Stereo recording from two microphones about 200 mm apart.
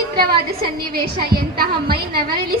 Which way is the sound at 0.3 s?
50° right (ahead or behind).